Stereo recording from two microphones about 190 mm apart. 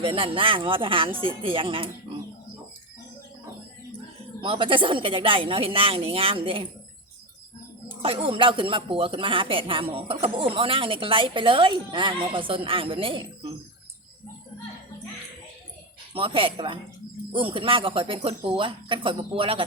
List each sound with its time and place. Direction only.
0.0 s speech: 30° right (ahead or behind)
4.4 s speech: 25° right (ahead or behind)
8.0 s speech: 30° right (ahead or behind)
16.1 s speech: 25° right (ahead or behind)